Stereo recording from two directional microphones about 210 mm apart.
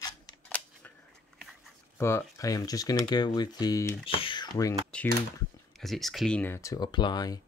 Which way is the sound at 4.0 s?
25° left (ahead or behind).